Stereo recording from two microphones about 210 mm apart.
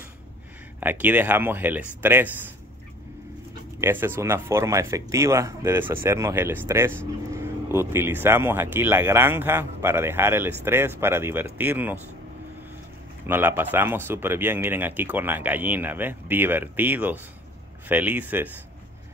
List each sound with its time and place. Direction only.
0.7 s speech: 10° right (ahead or behind)
3.8 s speech: 10° right (ahead or behind)
13.3 s speech: 10° right (ahead or behind)